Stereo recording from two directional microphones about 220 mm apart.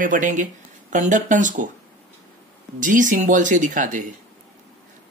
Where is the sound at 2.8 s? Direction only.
35° right (ahead or behind).